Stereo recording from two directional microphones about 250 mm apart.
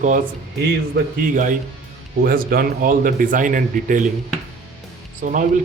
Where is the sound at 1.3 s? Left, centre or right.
Right.